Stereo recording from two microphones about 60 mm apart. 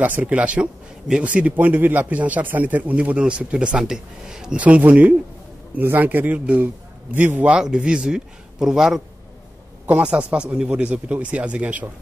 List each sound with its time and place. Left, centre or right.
0.0 s a man's voice: right
1.6 s a man's voice: right; by 4.6 s centre
4.6 s a man's voice: right
7.4 s speech: centre
9.8 s a man's voice: right